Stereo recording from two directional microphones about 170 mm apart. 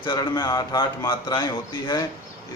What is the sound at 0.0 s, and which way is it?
Speech, 25° left (ahead or behind).